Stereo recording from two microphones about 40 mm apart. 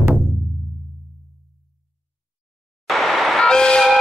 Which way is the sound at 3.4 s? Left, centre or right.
Centre.